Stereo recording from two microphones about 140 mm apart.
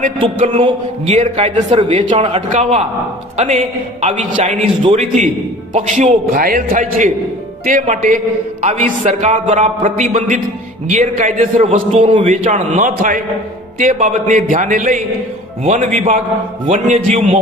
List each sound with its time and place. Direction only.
0.5 s a man's voice: 40° right (ahead or behind)
1.0 s speech: 55° right (ahead or behind)
4.8 s a man's voice: 40° right (ahead or behind)
5.7 s speech: 60° right (ahead or behind); by 7.1 s 80° right
7.6 s speech: 65° right (ahead or behind)
11.5 s a man's voice: 45° right (ahead or behind)
12.2 s speech: 60° right (ahead or behind)